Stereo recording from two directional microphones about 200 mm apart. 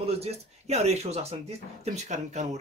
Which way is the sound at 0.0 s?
30° right (ahead or behind).